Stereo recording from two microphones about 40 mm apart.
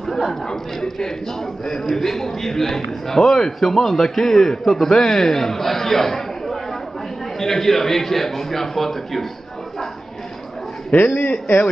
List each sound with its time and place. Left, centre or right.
0.0 s a man's voice: centre
10.9 s a man's voice: left